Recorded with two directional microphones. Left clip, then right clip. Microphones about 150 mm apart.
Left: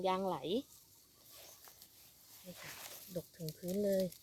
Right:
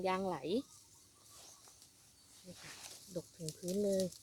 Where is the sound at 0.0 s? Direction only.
25° left (ahead or behind).